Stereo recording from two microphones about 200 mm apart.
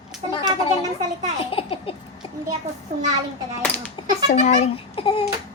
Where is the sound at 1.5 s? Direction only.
30° left (ahead or behind).